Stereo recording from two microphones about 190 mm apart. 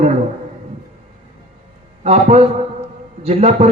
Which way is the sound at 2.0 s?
35° right (ahead or behind).